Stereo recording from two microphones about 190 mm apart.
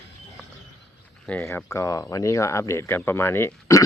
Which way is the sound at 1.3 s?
10° left (ahead or behind).